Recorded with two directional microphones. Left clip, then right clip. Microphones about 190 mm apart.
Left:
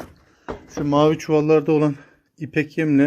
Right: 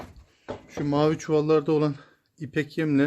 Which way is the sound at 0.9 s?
10° right (ahead or behind).